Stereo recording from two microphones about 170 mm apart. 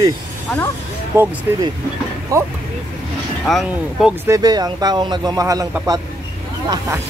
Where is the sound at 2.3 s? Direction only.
20° right (ahead or behind).